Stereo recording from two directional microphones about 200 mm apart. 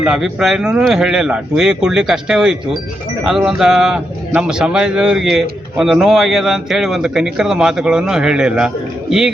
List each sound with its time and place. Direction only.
0.0 s a man's voice: 5° right (ahead or behind)